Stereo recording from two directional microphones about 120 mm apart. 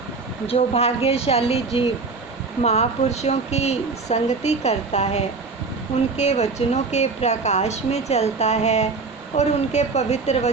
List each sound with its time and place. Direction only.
0.4 s speech: 55° left (ahead or behind)
2.6 s speech: 65° left (ahead or behind)